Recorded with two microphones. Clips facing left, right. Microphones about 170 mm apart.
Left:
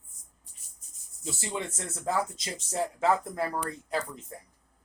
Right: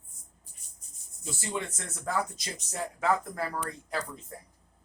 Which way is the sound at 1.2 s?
20° left (ahead or behind).